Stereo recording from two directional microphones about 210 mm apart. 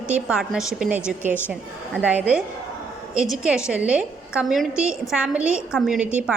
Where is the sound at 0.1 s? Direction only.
5° right (ahead or behind).